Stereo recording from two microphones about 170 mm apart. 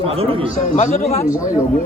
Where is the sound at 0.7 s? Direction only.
45° left (ahead or behind).